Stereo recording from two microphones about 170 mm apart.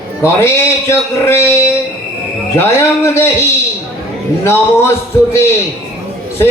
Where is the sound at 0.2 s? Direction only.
15° left (ahead or behind).